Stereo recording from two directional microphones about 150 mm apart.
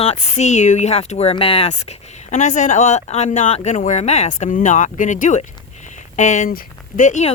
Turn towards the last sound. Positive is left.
turn(degrees=55)  # may be behind; listen again after turning